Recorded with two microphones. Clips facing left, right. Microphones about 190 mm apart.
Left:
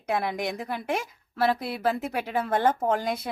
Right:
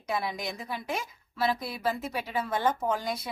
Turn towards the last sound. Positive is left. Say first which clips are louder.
# left 4 dB
turn(degrees=60)  # may be behind; listen again after turning